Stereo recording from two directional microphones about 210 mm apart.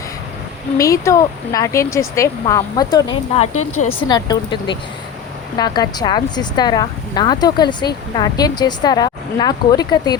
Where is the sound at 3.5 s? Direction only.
90° left.